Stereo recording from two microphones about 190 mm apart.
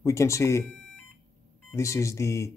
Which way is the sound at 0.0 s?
15° left (ahead or behind).